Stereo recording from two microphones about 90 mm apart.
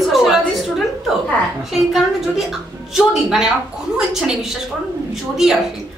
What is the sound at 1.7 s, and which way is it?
A woman's voice, 5° right (ahead or behind).